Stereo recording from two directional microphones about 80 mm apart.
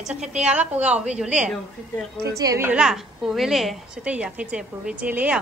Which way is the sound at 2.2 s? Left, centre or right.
Right.